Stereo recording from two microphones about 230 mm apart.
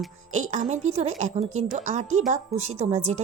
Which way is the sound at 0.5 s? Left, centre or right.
Right.